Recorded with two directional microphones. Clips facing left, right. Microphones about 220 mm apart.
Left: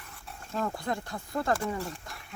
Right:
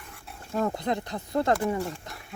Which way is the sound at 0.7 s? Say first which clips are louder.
Right 4 dB; 20° right (ahead or behind).